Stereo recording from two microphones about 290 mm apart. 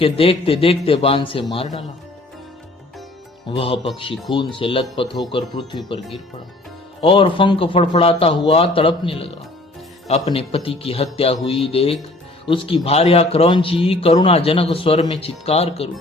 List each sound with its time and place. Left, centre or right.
0.0 s speech: centre
3.5 s speech: centre
7.0 s speech: centre